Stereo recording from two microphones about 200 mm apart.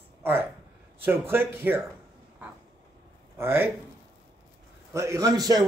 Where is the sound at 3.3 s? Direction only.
10° right (ahead or behind).